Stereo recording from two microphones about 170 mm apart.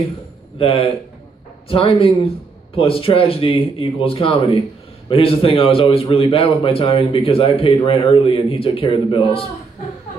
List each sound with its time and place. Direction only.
0.6 s a man's voice: 35° left (ahead or behind)